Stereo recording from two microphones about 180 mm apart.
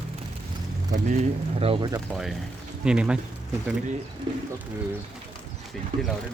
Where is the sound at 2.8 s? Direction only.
5° right (ahead or behind).